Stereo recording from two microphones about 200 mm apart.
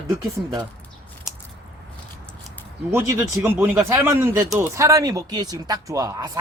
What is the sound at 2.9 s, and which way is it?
Speech, 10° right (ahead or behind).